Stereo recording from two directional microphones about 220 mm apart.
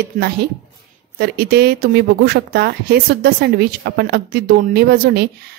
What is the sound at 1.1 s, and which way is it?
A woman's voice, 45° right (ahead or behind).